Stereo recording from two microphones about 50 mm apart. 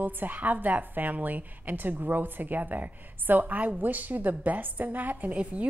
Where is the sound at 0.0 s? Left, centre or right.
Right.